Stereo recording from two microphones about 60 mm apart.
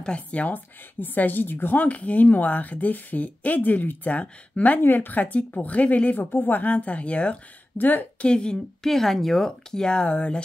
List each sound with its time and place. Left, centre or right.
0.0 s speech: left
8.2 s speech: centre
8.8 s speech: centre